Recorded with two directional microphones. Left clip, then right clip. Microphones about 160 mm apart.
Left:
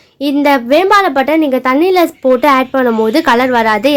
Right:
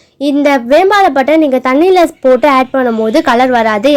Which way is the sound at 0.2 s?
15° right (ahead or behind).